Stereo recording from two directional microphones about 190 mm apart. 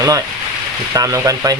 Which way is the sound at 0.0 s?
15° right (ahead or behind).